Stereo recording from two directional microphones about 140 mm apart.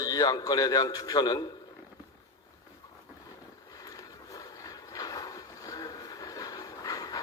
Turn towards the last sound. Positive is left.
turn(degrees=25)  # may be behind; listen again after turning